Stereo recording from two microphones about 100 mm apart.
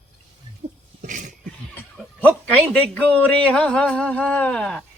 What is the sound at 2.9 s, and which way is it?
A man's voice, 15° left (ahead or behind).